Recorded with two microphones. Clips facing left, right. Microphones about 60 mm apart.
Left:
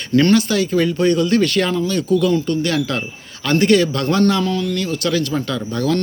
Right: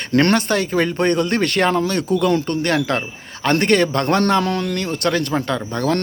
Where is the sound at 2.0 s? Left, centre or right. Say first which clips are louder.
Left 1 dB; right.